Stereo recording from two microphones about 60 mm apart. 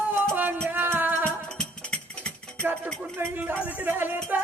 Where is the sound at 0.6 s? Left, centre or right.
Right.